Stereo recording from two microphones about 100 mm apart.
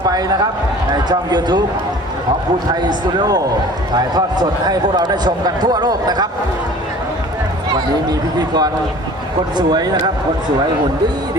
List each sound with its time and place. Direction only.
1.1 s speech: 45° right (ahead or behind)
3.1 s speech: 45° right (ahead or behind)
8.4 s speech: 40° right (ahead or behind)